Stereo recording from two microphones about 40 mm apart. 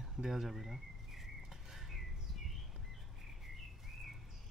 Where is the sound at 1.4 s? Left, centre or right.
Centre.